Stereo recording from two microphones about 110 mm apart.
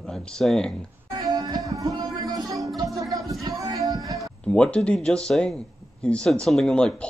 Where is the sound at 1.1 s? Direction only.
35° right (ahead or behind).